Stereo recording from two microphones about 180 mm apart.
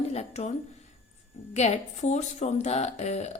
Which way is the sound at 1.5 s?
40° left (ahead or behind).